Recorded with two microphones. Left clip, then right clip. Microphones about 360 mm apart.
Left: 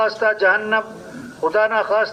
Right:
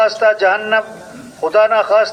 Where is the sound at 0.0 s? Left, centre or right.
Right.